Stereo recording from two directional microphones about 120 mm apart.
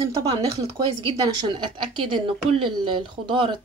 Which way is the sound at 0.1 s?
30° right (ahead or behind).